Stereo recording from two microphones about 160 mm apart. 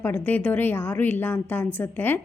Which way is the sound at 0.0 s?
10° left (ahead or behind).